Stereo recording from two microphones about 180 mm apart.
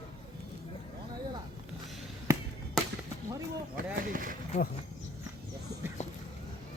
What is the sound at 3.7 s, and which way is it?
Speech, 50° right (ahead or behind).